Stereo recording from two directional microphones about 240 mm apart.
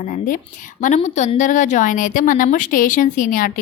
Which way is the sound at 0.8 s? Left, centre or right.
Left.